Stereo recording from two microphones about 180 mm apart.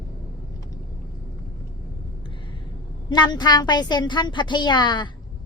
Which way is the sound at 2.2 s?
25° left (ahead or behind).